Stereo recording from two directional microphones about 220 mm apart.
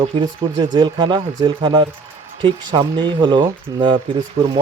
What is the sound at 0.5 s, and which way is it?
Speech, 20° right (ahead or behind).